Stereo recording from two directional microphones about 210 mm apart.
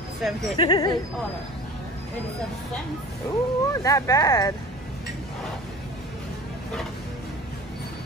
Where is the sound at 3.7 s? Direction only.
15° left (ahead or behind).